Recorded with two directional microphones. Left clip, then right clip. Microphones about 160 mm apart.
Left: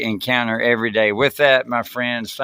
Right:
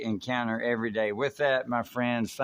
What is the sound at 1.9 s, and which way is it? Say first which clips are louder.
Speech: left 7 dB; 10° left (ahead or behind).